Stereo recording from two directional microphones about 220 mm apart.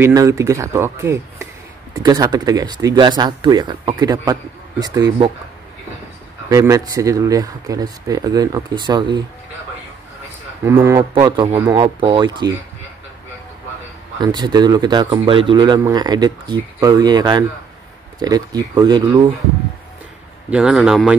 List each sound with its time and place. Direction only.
0.0 s speech: 15° right (ahead or behind)
6.5 s speech: 15° right (ahead or behind)
10.6 s speech: 10° right (ahead or behind)
14.2 s speech: 20° right (ahead or behind)
20.4 s a man's voice: 5° right (ahead or behind)